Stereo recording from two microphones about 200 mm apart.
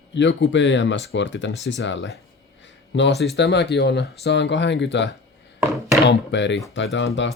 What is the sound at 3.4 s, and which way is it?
Speech, 60° left (ahead or behind).